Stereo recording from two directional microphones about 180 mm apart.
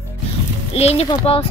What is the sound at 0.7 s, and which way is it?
Speech, 35° left (ahead or behind).